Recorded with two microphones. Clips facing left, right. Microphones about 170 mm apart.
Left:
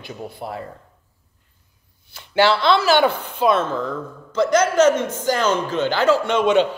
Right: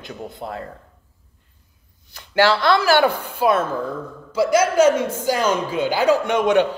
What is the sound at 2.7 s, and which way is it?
Speech, 10° right (ahead or behind).